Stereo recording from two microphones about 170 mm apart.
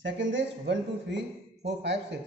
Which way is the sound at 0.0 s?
90° right.